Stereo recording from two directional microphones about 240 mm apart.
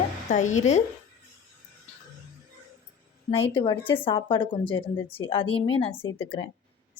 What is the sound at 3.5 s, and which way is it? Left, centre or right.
A woman's voice, centre.